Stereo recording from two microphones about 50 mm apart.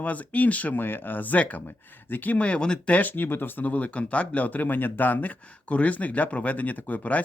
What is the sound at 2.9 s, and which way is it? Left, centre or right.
Speech, left.